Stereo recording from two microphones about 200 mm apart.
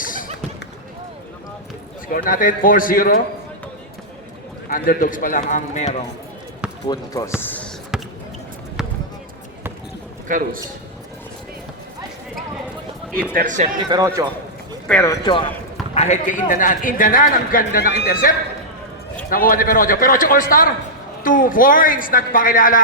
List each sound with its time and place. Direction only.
0.0 s basketball bounce: 45° left (ahead or behind)
2.0 s a man's voice: 45° left (ahead or behind)
4.7 s a man's voice: 45° left (ahead or behind)
6.8 s speech: 20° left (ahead or behind)
7.3 s basketball bounce: 10° left (ahead or behind)
10.2 s a man's voice: 40° right (ahead or behind)
13.3 s a man's voice: 40° right (ahead or behind)
13.9 s a man's voice: 15° right (ahead or behind)
14.8 s speech: 5° left (ahead or behind)
15.2 s speech: 25° left (ahead or behind)
16.0 s a man's voice: 35° left (ahead or behind)